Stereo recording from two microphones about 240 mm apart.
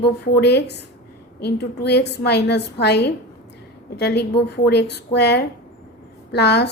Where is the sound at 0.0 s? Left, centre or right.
Left.